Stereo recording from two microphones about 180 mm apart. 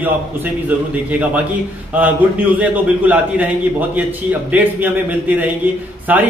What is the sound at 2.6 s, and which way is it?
A man's voice, 10° right (ahead or behind).